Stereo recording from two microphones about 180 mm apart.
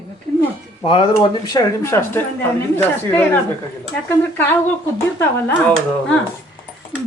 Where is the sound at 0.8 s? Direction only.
30° left (ahead or behind).